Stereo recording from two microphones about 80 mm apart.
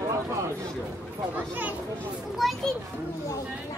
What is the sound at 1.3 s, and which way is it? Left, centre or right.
Speech, right.